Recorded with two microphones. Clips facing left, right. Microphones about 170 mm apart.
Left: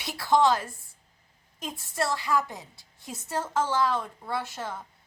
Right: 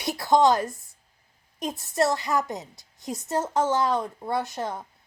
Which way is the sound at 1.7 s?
20° right (ahead or behind).